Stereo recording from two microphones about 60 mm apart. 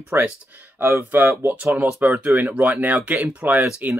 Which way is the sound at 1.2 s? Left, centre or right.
Right.